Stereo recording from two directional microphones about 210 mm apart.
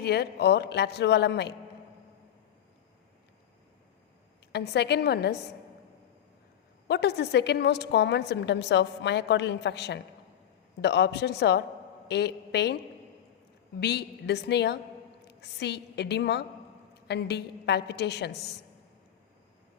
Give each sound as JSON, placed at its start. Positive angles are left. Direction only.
{"t": 0.0, "sound": "a woman's voice", "side_deg": 50}
{"t": 4.5, "sound": "a woman's voice", "side_deg": 55}
{"t": 6.8, "sound": "a woman's voice", "side_deg": 50}
{"t": 13.7, "sound": "a woman's voice", "side_deg": 50}